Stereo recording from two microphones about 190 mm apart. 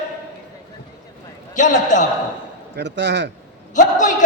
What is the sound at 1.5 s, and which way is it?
Speech, 40° left (ahead or behind).